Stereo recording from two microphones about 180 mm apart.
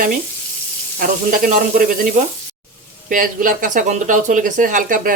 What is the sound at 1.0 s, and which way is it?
Speech, 50° right (ahead or behind).